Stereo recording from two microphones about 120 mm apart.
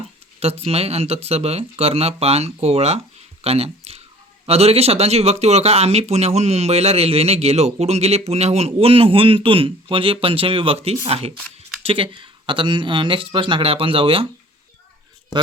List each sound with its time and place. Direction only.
0.3 s speech: 55° right (ahead or behind)